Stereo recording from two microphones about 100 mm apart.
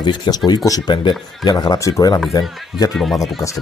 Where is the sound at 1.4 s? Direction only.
45° left (ahead or behind).